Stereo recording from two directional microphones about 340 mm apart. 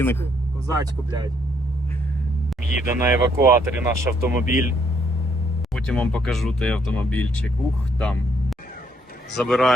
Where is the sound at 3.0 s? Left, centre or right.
Centre.